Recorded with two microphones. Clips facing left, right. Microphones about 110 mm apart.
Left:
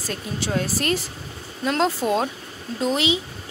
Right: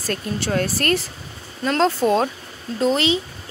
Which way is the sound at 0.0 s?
5° left (ahead or behind).